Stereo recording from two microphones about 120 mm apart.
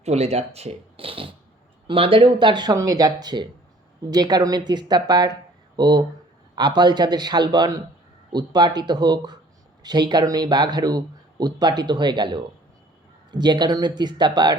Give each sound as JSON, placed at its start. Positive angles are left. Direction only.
{"t": 0.0, "sound": "speech", "side_deg": -65}